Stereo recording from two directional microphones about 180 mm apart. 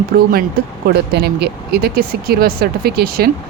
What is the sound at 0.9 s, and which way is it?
Speech, 65° right (ahead or behind).